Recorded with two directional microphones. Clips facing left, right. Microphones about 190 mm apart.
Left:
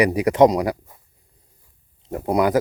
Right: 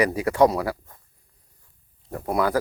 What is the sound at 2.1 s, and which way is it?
Speech, 20° left (ahead or behind).